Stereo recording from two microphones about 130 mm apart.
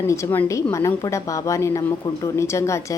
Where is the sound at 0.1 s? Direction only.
20° left (ahead or behind).